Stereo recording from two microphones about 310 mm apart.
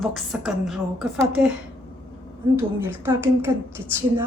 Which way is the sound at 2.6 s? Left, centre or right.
Centre.